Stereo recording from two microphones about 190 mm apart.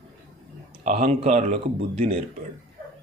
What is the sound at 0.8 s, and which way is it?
Speech, 40° right (ahead or behind).